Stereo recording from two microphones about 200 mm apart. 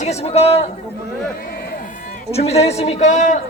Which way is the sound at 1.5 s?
50° left (ahead or behind).